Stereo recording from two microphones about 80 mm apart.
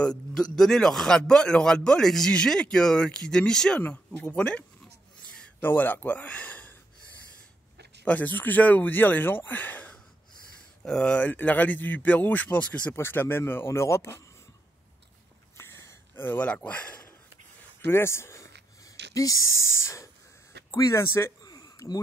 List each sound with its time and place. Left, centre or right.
0.0 s a man's voice: centre
3.8 s a man's voice: left
8.0 s speech: left
12.9 s speech: left
15.5 s a sound: left
16.3 s speech: centre
17.8 s speech: left
18.9 s speech: left
21.5 s a sound: left